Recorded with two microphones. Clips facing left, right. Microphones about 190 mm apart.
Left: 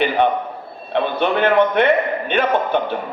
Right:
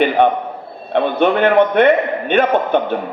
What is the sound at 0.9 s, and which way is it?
A man's voice, 55° right (ahead or behind).